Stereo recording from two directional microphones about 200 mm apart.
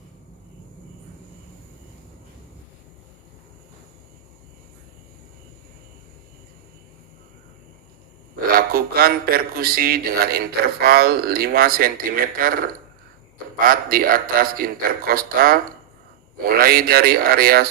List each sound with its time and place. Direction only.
8.5 s speech: 50° right (ahead or behind)
13.7 s speech: 45° right (ahead or behind)